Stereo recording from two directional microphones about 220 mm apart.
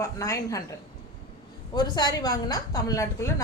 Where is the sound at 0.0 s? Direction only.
15° left (ahead or behind).